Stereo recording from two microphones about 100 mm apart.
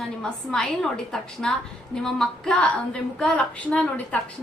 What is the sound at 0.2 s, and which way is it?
A woman's voice, 5° left (ahead or behind).